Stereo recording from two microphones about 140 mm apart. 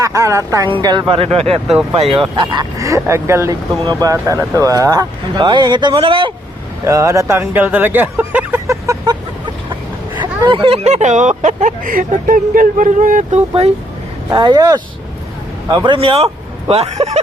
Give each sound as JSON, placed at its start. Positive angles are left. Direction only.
{"t": 0.0, "sound": "speech", "side_deg": -20}
{"t": 0.7, "sound": "speech", "side_deg": -30}
{"t": 2.3, "sound": "speech", "side_deg": -30}
{"t": 6.8, "sound": "speech", "side_deg": -20}
{"t": 10.2, "sound": "speech", "side_deg": -35}
{"t": 13.5, "sound": "speech", "side_deg": -45}
{"t": 14.3, "sound": "speech", "side_deg": -30}